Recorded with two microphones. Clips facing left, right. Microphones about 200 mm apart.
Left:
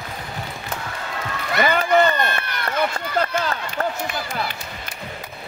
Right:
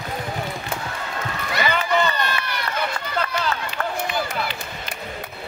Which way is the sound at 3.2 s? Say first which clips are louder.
Left 3 dB; 40° left (ahead or behind).